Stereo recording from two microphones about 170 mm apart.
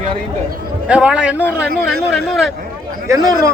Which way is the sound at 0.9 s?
5° right (ahead or behind).